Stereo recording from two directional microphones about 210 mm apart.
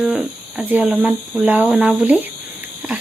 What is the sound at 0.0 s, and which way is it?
Speech, 5° right (ahead or behind).